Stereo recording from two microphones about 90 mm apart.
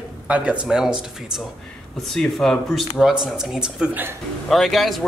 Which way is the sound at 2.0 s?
5° left (ahead or behind).